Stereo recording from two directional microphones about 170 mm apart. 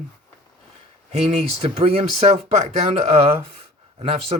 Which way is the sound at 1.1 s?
35° right (ahead or behind).